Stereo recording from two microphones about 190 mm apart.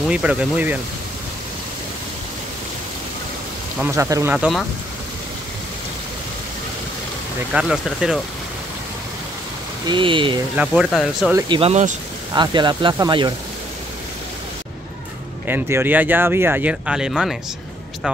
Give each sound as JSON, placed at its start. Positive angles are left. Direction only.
{"t": 0.1, "sound": "speech", "side_deg": -5}
{"t": 3.8, "sound": "speech", "side_deg": -15}
{"t": 7.5, "sound": "speech", "side_deg": -5}
{"t": 9.8, "sound": "speech", "side_deg": -25}
{"t": 10.5, "sound": "speech", "side_deg": -5}
{"t": 11.3, "sound": "speech", "side_deg": -25}
{"t": 15.4, "sound": "speech", "side_deg": -10}